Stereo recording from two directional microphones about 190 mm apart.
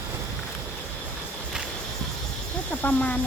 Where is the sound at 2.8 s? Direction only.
10° left (ahead or behind).